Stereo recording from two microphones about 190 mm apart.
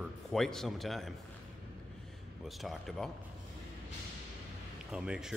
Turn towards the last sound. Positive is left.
turn(degrees=-5)  # may be behind; listen again after turning